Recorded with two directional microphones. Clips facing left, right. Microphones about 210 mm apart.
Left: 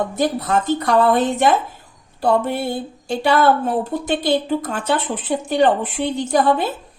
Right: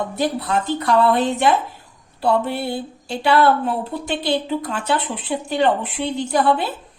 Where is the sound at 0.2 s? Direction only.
45° left (ahead or behind).